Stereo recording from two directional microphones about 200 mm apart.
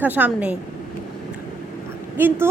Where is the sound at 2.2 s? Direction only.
10° right (ahead or behind).